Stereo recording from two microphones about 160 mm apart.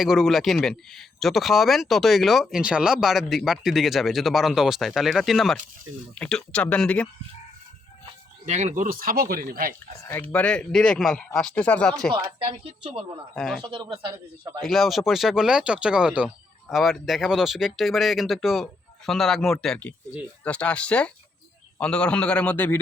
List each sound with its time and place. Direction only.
0.0 s speech: centre (ahead or behind)
8.4 s speech: 50° right (ahead or behind)
10.0 s speech: 15° left (ahead or behind)
12.2 s speech: 35° right (ahead or behind)
13.3 s speech: centre (ahead or behind)
13.6 s a man's voice: 35° right (ahead or behind)
14.6 s speech: centre (ahead or behind)